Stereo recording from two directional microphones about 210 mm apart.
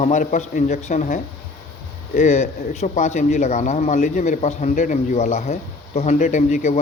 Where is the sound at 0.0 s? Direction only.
35° left (ahead or behind).